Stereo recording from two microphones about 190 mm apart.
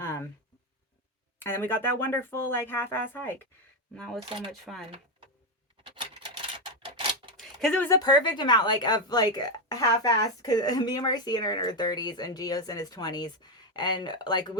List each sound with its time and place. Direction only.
1.4 s speech: 10° left (ahead or behind)
4.3 s speech: 25° right (ahead or behind)
5.8 s typewriter: 25° right (ahead or behind)
7.3 s a sound: centre (ahead or behind)
7.9 s speech: 20° left (ahead or behind)